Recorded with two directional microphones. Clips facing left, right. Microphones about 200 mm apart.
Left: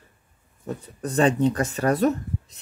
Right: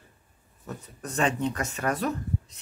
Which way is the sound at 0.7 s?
35° left (ahead or behind).